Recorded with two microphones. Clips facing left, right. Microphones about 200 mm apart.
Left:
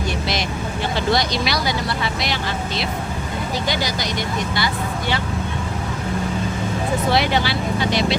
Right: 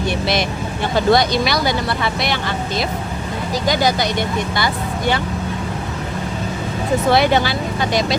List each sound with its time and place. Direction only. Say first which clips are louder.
0.9 s speech: right 7 dB; 50° right (ahead or behind)
7.1 s speech: right 5 dB; 50° right (ahead or behind)